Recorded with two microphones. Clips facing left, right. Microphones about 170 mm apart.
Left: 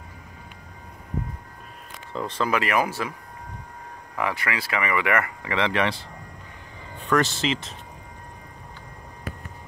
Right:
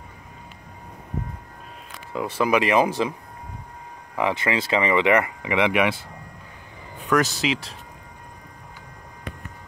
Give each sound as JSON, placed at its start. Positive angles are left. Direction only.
{"t": 2.1, "sound": "speech", "side_deg": -10}
{"t": 4.2, "sound": "speech", "side_deg": -20}
{"t": 7.0, "sound": "a sound", "side_deg": -5}
{"t": 7.4, "sound": "speech", "side_deg": 0}